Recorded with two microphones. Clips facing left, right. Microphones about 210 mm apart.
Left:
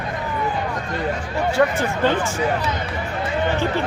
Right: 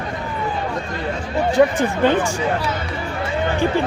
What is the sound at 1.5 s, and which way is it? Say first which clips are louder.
Speech: right 4 dB; 15° right (ahead or behind).